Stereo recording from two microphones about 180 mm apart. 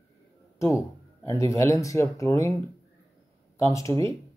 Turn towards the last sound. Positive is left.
turn(degrees=15)  # may be behind; listen again after turning